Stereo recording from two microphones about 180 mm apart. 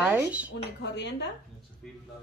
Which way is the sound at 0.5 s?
70° left (ahead or behind).